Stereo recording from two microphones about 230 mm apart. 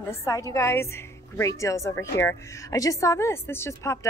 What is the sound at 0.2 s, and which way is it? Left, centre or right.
A woman's voice, centre.